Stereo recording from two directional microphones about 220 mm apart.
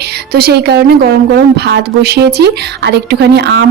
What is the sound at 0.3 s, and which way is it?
A woman's voice, 45° right (ahead or behind).